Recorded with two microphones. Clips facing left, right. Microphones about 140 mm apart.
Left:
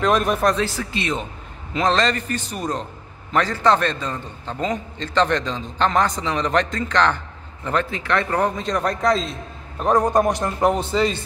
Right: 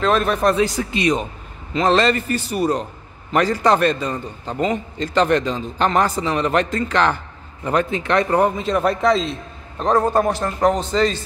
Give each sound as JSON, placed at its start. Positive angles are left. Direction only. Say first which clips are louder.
{"t": 0.0, "sound": "a man's voice", "louder": "right 1 dB", "side_deg": 15}
{"t": 0.4, "sound": "a man's voice", "louder": "right 3 dB", "side_deg": -5}
{"t": 0.7, "sound": "a man's voice", "louder": "right 6 dB", "side_deg": -15}
{"t": 7.6, "sound": "a man's voice", "louder": "right 4 dB", "side_deg": -20}
{"t": 9.8, "sound": "a man's voice", "louder": "even", "side_deg": 10}